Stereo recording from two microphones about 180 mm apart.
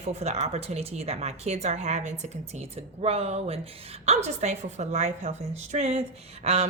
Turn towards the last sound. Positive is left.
turn(degrees=-35)  # may be behind; listen again after turning